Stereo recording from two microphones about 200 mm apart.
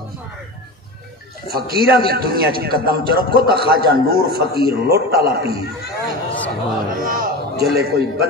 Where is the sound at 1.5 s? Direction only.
50° right (ahead or behind).